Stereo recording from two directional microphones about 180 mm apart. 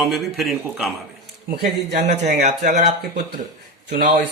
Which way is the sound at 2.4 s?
40° right (ahead or behind).